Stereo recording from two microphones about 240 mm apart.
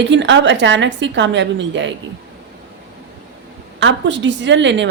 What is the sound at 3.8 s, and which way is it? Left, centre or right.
A woman's voice, right.